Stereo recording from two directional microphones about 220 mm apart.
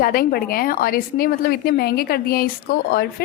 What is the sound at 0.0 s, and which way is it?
A woman's voice, 40° left (ahead or behind).